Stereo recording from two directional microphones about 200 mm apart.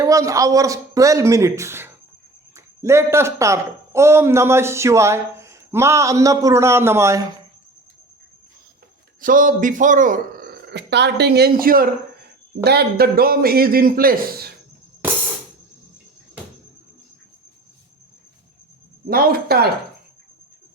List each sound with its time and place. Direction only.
0.0 s a man's voice: 15° right (ahead or behind)
9.2 s speech: 40° right (ahead or behind)
19.0 s speech: 45° right (ahead or behind)